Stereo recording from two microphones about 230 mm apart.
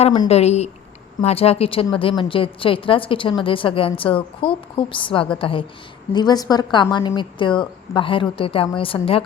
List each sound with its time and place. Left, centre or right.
0.0 s a woman's voice: left